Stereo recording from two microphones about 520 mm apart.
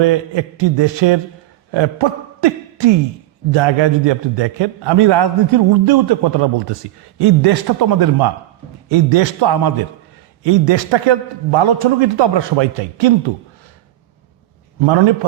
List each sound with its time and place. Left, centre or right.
0.0 s a man's voice: right
8.9 s a man's voice: right
14.8 s a man's voice: right